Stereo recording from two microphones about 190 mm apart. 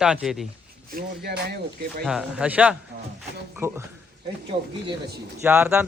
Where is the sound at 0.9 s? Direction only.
55° right (ahead or behind).